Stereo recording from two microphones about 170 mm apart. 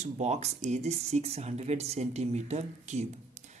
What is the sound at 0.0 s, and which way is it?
Speech, 40° right (ahead or behind).